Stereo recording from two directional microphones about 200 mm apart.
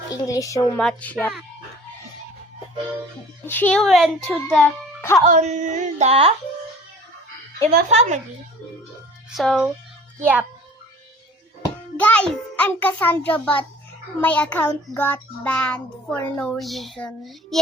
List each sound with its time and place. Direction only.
0.1 s a woman's voice: 15° left (ahead or behind)
0.8 s a child's voice: 5° left (ahead or behind)
3.4 s a child's voice: 10° left (ahead or behind)
5.3 s a sound: 35° right (ahead or behind)
7.9 s a sound: 35° right (ahead or behind)
9.3 s a child's voice: centre (ahead or behind)
11.9 s a child's voice: 5° left (ahead or behind)